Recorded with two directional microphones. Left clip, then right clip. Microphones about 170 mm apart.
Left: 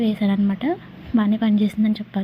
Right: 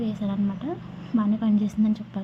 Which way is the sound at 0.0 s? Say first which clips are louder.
Left 7 dB; 15° left (ahead or behind).